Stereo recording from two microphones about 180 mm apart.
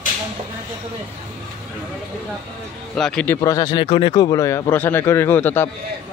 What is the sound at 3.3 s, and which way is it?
Speech, 20° left (ahead or behind).